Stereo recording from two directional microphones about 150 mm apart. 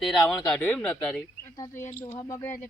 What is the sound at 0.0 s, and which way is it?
Speech, centre (ahead or behind).